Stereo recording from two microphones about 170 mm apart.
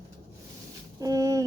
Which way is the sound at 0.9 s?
20° right (ahead or behind).